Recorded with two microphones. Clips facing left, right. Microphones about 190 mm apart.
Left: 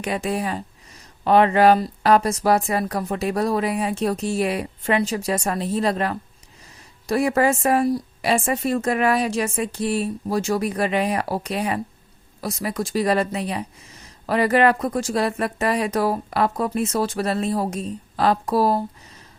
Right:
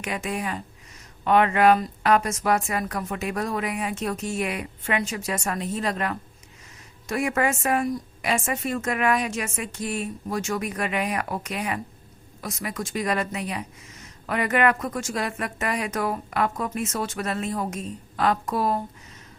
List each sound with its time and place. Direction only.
0.0 s speech: 35° left (ahead or behind)